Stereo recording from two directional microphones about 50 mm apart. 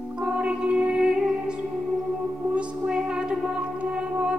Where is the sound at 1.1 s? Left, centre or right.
Centre.